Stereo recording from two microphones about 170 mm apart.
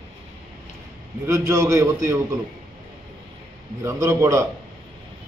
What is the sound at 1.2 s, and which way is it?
Speech, 15° right (ahead or behind).